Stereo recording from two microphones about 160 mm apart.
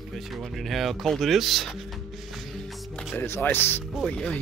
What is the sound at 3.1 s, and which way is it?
Speech, 10° left (ahead or behind).